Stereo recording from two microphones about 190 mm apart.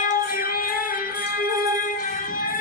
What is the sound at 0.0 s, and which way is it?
Music, 45° left (ahead or behind).